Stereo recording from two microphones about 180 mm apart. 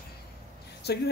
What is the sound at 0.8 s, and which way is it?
Speech, 65° left (ahead or behind).